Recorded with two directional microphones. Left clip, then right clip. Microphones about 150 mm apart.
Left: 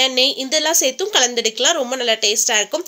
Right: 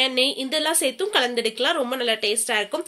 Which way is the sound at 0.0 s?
40° left (ahead or behind).